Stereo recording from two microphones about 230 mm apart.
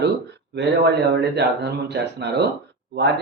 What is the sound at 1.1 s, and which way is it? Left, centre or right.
Speech, right.